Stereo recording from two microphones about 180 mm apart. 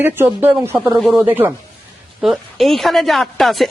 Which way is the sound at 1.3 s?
10° right (ahead or behind).